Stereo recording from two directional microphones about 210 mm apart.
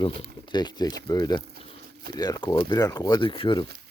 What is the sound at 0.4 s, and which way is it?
Speech, 20° left (ahead or behind).